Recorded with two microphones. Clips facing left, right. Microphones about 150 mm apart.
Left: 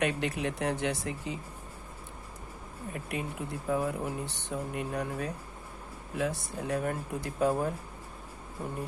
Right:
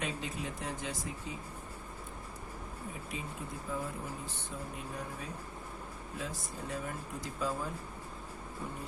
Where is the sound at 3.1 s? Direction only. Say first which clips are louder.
Left 8 dB; 70° left (ahead or behind).